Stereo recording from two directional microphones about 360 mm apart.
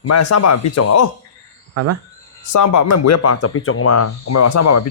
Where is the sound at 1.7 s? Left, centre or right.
Right.